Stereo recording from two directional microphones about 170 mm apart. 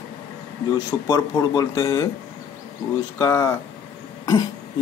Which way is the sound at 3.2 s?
20° left (ahead or behind).